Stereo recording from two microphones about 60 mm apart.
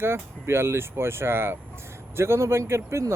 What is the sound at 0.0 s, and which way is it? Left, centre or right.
Speech, right.